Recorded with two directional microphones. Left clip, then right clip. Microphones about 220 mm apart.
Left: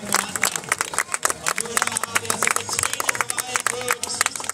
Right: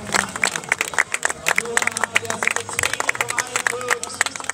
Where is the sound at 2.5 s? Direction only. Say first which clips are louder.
Right 2 dB; 50° left (ahead or behind).